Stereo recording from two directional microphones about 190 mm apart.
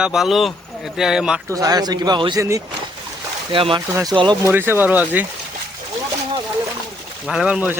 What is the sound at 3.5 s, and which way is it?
Speech, 25° right (ahead or behind).